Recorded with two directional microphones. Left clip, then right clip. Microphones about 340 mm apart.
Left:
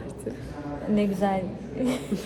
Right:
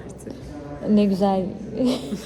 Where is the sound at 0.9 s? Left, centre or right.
Right.